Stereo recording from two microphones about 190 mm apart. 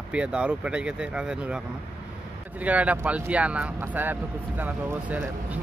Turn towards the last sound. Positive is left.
turn(degrees=-10)  # may be behind; listen again after turning